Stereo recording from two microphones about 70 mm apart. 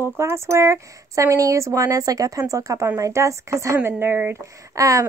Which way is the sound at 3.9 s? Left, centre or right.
Right.